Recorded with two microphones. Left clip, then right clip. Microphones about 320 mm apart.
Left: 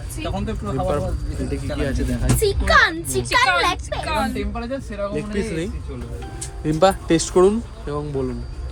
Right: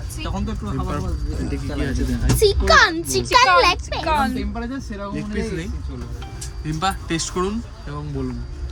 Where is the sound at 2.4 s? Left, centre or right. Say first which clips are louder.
Right 2 dB; right.